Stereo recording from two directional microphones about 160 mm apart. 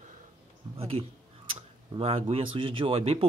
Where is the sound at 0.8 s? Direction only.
35° right (ahead or behind).